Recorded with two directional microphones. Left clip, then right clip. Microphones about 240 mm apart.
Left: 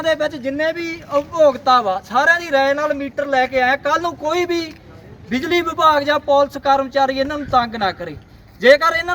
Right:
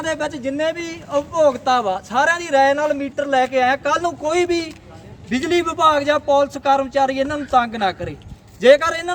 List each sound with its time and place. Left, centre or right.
0.1 s a man's voice: centre